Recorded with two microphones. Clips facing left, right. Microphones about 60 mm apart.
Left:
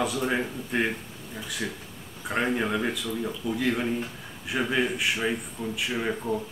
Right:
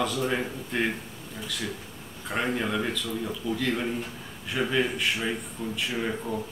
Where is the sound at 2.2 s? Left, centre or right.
Centre.